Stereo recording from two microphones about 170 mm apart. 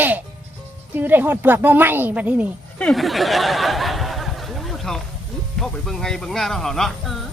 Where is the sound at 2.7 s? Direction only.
5° left (ahead or behind).